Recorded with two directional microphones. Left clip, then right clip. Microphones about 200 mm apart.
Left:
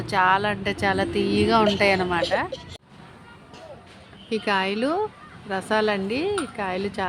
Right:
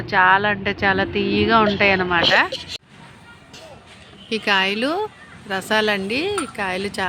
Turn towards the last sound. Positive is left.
turn(degrees=-5)  # may be behind; listen again after turning